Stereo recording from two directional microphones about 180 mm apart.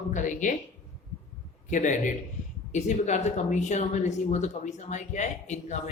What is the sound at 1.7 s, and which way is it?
Speech, 45° left (ahead or behind).